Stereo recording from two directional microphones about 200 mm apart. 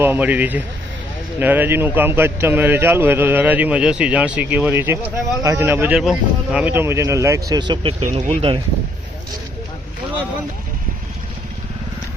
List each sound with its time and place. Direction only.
0.0 s a man's voice: 10° right (ahead or behind); by 8.6 s 25° right (ahead or behind)